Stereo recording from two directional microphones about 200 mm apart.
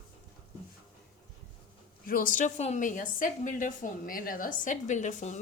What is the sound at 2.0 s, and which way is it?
Speech, 45° left (ahead or behind).